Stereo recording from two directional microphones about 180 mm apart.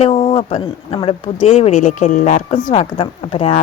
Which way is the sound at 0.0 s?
30° left (ahead or behind).